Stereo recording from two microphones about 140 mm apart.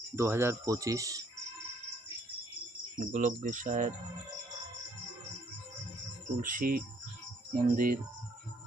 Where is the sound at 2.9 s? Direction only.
60° right (ahead or behind).